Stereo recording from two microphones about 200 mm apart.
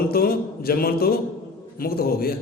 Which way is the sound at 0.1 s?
50° left (ahead or behind).